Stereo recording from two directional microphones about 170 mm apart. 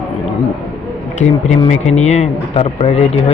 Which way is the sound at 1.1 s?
40° left (ahead or behind).